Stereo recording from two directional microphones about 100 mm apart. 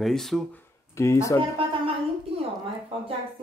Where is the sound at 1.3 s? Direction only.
65° right (ahead or behind).